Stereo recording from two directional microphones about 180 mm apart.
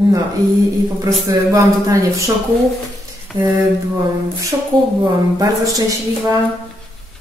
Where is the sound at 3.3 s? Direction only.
Centre (ahead or behind).